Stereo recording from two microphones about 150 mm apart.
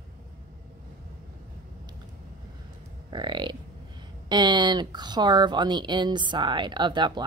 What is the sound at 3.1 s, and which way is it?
Speech, 30° right (ahead or behind).